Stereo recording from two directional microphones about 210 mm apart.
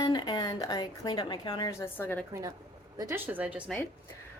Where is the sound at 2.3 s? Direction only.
15° right (ahead or behind).